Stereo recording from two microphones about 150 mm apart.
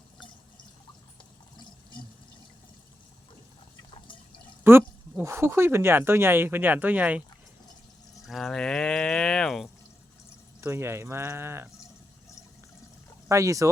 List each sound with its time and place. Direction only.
4.6 s speech: 15° right (ahead or behind)
8.3 s cattle: 5° left (ahead or behind)
10.6 s speech: 15° right (ahead or behind)
13.2 s speech: 20° right (ahead or behind)